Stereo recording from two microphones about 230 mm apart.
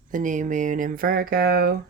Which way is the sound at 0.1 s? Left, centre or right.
Right.